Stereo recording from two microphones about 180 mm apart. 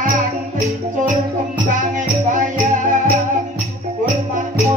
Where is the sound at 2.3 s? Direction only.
45° right (ahead or behind).